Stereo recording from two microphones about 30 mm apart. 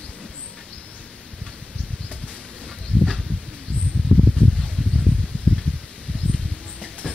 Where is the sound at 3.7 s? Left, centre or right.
Left.